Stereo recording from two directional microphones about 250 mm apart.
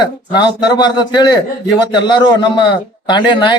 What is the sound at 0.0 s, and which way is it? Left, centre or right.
Speech, centre.